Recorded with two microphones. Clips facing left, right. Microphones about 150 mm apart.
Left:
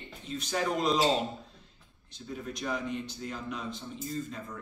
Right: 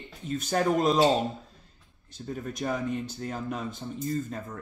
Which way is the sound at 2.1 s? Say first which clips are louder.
Right 4 dB; 45° right (ahead or behind).